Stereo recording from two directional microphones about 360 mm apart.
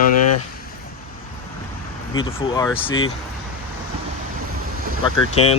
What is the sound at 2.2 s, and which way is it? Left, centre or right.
Speech, centre.